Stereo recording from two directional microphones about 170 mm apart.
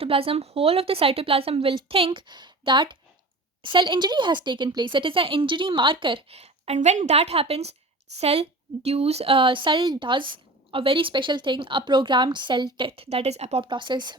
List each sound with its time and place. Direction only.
0.0 s a woman's voice: 35° right (ahead or behind)